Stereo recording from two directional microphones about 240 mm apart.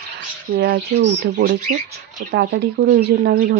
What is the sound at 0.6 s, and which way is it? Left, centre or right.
Speech, right.